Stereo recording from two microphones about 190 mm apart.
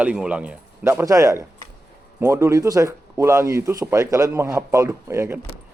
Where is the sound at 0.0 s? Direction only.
5° right (ahead or behind).